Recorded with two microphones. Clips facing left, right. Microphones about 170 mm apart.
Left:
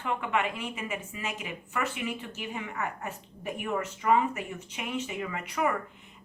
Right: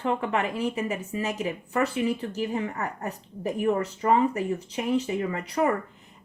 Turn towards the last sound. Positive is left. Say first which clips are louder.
# right 5 dB
turn(degrees=-35)  # may be behind; listen again after turning